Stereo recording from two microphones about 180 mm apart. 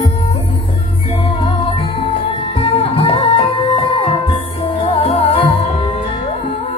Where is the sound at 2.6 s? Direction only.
30° left (ahead or behind).